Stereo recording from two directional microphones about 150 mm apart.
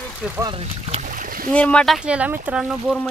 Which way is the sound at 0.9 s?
60° right (ahead or behind).